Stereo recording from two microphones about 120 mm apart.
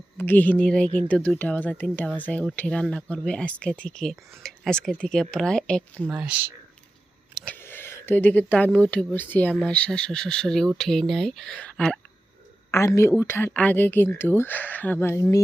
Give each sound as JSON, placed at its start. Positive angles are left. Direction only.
{"t": 0.2, "sound": "speech", "side_deg": 15}
{"t": 6.1, "sound": "speech", "side_deg": -10}
{"t": 7.4, "sound": "speech", "side_deg": 15}
{"t": 12.7, "sound": "speech", "side_deg": 25}